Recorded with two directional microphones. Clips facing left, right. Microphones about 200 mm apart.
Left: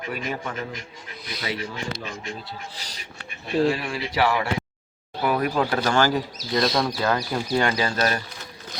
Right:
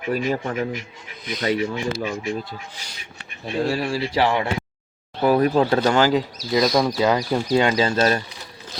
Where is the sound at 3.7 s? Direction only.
30° right (ahead or behind).